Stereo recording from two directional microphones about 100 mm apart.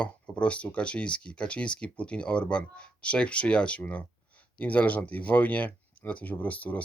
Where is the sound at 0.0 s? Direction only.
10° left (ahead or behind).